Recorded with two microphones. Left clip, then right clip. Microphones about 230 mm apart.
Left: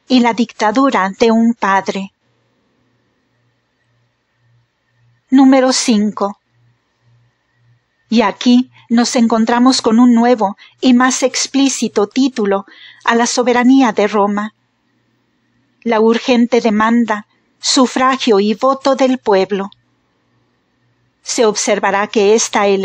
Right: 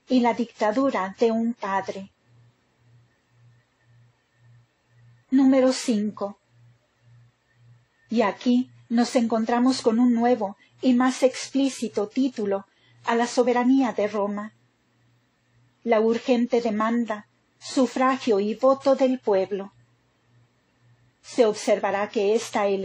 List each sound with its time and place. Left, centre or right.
0.1 s a woman's voice: left
5.3 s a woman's voice: left
8.1 s a woman's voice: left
15.9 s a woman's voice: left
21.2 s a woman's voice: left